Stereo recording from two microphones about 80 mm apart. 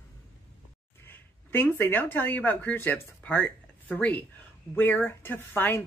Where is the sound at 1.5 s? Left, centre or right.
Left.